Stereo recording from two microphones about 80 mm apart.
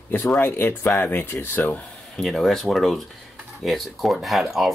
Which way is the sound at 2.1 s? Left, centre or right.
Centre.